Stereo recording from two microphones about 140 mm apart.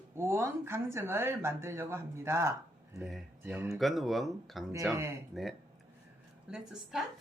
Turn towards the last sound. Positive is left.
turn(degrees=-5)  # may be behind; listen again after turning